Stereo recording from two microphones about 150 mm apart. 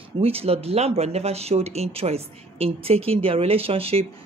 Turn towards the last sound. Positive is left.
turn(degrees=-40)  # may be behind; listen again after turning